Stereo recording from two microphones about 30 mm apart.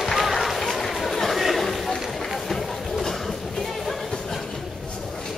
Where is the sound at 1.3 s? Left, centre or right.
Centre.